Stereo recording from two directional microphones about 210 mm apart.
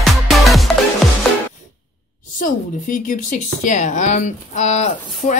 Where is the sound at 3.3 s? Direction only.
35° left (ahead or behind).